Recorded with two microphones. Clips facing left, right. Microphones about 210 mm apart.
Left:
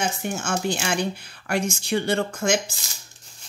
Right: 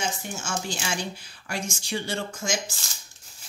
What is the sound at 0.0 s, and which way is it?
Speech, 60° left (ahead or behind).